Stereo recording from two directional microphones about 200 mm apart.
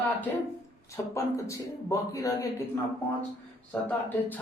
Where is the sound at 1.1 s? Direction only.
15° left (ahead or behind).